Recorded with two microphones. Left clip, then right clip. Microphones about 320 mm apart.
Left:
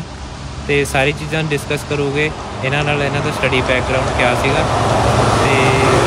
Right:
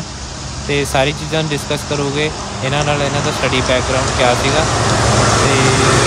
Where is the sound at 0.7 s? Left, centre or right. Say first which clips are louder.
Even; centre.